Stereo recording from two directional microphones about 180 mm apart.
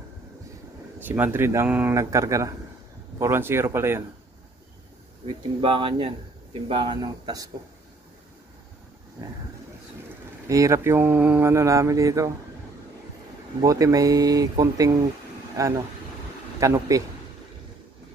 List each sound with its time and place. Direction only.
1.0 s speech: 10° right (ahead or behind)
5.2 s speech: 30° right (ahead or behind)
10.5 s speech: 15° right (ahead or behind)
13.6 s speech: 20° right (ahead or behind)